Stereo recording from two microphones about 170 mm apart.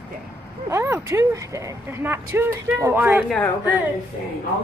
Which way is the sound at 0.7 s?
15° right (ahead or behind).